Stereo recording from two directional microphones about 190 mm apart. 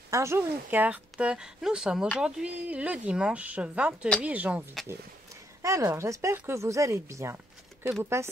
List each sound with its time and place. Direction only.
0.1 s a woman's voice: 15° right (ahead or behind)